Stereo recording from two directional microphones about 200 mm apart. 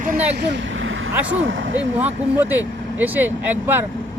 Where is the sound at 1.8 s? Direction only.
10° right (ahead or behind).